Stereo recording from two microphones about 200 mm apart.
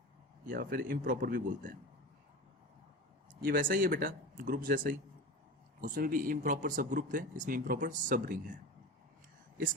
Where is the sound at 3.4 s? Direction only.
45° right (ahead or behind).